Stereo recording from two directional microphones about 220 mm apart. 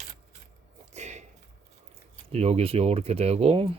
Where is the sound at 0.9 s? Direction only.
30° right (ahead or behind).